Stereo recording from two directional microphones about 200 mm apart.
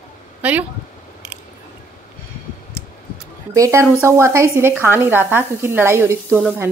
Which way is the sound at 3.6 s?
15° right (ahead or behind).